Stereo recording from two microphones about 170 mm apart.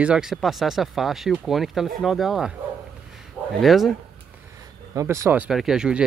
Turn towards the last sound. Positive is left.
turn(degrees=-5)  # may be behind; listen again after turning